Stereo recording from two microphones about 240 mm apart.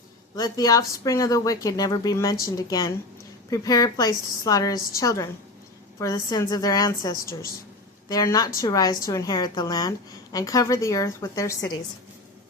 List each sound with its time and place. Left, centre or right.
0.3 s speech: centre